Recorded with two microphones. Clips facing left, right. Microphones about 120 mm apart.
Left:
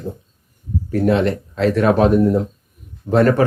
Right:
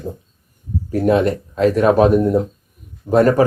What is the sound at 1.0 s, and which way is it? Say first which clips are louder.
Speech: right 2 dB; 15° right (ahead or behind).